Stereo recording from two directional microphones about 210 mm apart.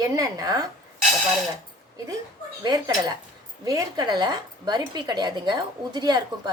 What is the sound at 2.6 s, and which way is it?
A woman's voice, 20° right (ahead or behind).